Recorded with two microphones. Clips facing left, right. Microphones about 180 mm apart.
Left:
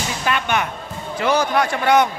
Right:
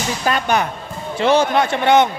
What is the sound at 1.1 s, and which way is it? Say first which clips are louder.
Speech: right 3 dB; 25° right (ahead or behind).